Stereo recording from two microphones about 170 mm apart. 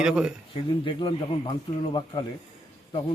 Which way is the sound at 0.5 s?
30° left (ahead or behind).